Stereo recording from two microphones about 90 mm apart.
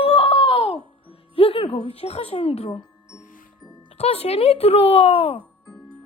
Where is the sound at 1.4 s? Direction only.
90° left.